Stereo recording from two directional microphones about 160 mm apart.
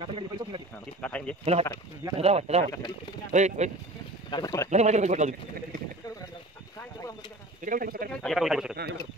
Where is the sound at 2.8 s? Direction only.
30° left (ahead or behind).